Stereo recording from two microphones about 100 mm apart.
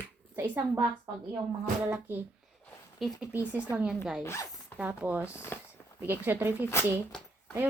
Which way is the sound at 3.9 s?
5° right (ahead or behind).